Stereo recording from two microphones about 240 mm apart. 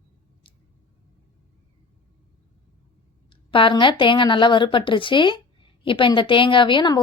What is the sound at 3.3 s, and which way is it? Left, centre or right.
A woman's voice, left.